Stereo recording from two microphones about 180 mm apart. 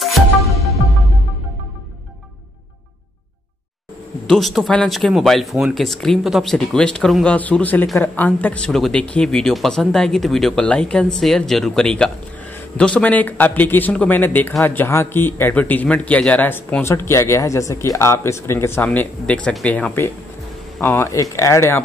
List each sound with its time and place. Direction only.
4.3 s speech: centre (ahead or behind)